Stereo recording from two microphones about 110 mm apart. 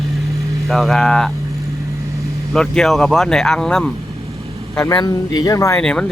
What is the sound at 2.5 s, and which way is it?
Speech, 5° left (ahead or behind).